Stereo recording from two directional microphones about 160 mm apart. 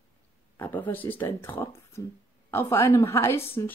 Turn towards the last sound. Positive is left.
turn(degrees=15)  # may be behind; listen again after turning